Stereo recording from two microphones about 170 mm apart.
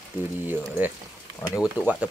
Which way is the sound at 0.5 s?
10° right (ahead or behind).